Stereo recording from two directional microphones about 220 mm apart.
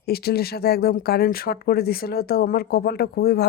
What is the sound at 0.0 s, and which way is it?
Speech, 45° left (ahead or behind).